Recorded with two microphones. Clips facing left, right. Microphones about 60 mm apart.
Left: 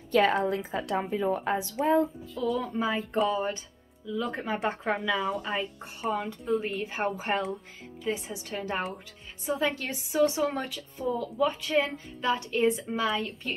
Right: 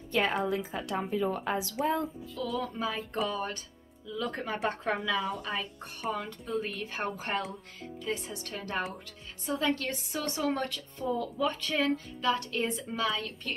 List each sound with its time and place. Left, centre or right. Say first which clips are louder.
0.1 s a woman's voice: left 5 dB; left
1.3 s speech: left 4 dB; left
2.0 s music: left 7 dB; centre
2.6 s a woman's voice: left 4 dB; centre
6.0 s a woman's voice: left 4 dB; centre
6.8 s a woman's voice: left 4 dB; centre